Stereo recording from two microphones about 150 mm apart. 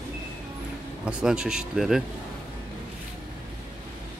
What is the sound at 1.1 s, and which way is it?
Speech, 5° right (ahead or behind).